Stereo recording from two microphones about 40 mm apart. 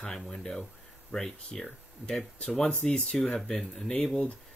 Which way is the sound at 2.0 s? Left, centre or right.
Left.